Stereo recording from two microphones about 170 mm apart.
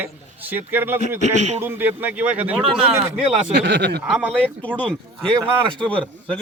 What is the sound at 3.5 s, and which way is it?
Speech, 90° right.